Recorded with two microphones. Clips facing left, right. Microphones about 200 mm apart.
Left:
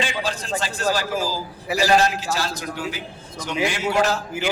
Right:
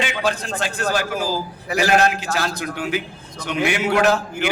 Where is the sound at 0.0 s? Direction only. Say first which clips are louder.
Right 3 dB; 60° right (ahead or behind).